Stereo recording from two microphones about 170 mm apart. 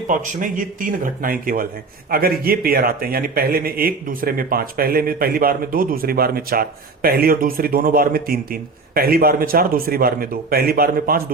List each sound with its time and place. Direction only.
0.1 s a man's voice: 50° right (ahead or behind)